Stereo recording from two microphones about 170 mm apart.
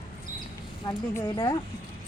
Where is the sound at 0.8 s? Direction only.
20° left (ahead or behind).